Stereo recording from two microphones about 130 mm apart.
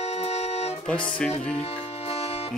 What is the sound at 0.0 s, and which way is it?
Music, 55° left (ahead or behind).